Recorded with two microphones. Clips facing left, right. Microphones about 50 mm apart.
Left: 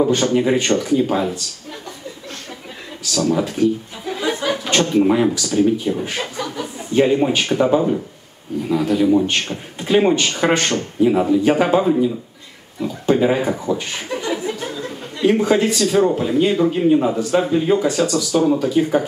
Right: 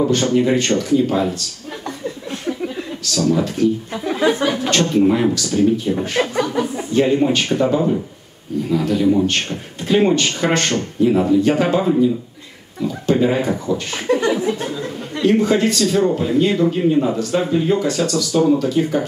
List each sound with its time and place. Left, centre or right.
0.0 s speech: centre
3.0 s speech: centre
4.2 s chuckle: right
4.6 s speech: centre
5.5 s speech: left
6.1 s chuckle: right
7.1 s speech: centre
11.8 s speech: centre
12.8 s speech: centre
14.6 s a sound: right
15.2 s speech: centre
18.1 s speech: left
18.5 s speech: centre